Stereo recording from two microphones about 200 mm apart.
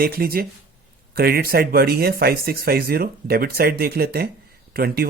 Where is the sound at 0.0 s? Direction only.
50° right (ahead or behind).